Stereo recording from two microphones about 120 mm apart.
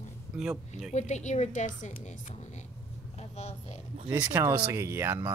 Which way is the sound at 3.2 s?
65° left (ahead or behind).